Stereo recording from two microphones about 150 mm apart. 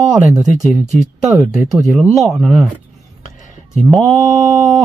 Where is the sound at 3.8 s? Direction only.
Centre (ahead or behind).